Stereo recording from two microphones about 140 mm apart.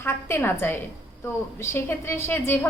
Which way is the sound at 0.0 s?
15° left (ahead or behind).